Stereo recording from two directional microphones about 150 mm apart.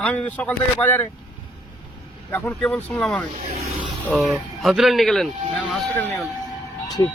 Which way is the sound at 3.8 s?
Centre (ahead or behind).